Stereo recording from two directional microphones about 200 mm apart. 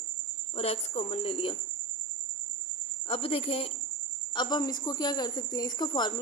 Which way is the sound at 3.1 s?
30° left (ahead or behind).